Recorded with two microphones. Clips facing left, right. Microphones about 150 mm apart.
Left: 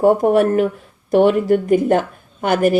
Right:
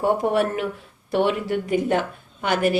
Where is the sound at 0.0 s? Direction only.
45° left (ahead or behind).